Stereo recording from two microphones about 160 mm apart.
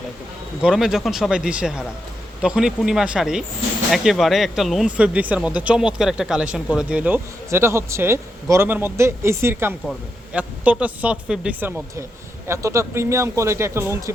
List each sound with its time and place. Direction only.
0.6 s speech: 5° right (ahead or behind)
12.5 s speech: 20° right (ahead or behind)